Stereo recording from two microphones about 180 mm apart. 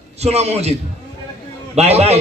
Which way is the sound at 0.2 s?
35° right (ahead or behind).